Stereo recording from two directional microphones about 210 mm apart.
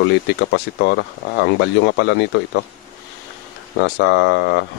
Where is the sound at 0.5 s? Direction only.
55° left (ahead or behind).